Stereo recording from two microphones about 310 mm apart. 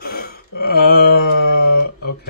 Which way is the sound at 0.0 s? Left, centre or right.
Left.